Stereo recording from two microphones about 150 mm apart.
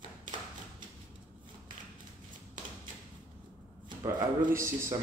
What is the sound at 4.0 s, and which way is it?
Speech, 20° right (ahead or behind).